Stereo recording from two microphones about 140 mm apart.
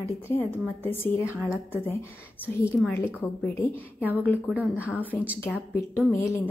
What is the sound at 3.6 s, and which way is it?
A woman's voice, 10° right (ahead or behind).